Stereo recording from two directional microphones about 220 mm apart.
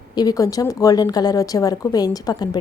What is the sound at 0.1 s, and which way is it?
A woman's voice, 15° left (ahead or behind).